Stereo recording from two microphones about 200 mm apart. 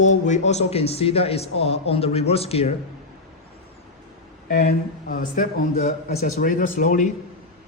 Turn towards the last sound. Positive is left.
turn(degrees=40)  # may be behind; listen again after turning